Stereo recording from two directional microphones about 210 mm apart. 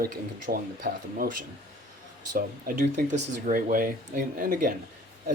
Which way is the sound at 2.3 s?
40° right (ahead or behind).